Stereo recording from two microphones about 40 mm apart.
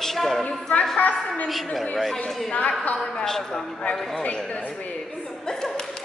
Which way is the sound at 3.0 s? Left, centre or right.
Centre.